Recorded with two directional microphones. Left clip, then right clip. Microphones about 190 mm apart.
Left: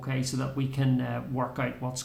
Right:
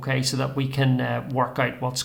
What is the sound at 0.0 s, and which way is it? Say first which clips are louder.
Speech: right 8 dB; 25° right (ahead or behind).